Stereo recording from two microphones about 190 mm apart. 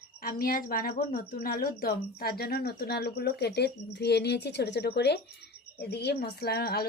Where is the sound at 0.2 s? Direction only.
50° left (ahead or behind).